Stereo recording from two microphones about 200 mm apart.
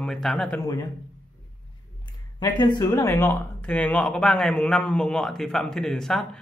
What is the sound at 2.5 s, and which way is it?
Speech, 20° left (ahead or behind).